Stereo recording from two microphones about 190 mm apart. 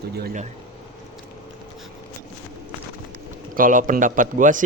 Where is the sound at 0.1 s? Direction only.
55° right (ahead or behind).